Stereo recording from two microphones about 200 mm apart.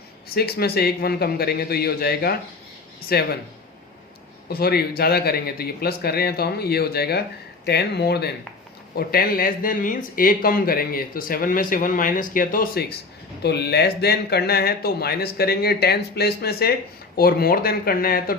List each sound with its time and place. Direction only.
0.3 s speech: 50° left (ahead or behind)
4.4 s speech: 50° left (ahead or behind)
13.4 s speech: 55° left (ahead or behind)